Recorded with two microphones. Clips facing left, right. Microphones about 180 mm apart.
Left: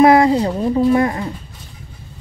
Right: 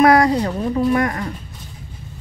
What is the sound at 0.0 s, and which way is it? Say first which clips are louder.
Speech: left 3 dB; 25° left (ahead or behind).